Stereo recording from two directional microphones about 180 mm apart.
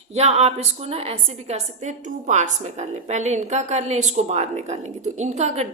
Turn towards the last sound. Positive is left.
turn(degrees=-40)  # may be behind; listen again after turning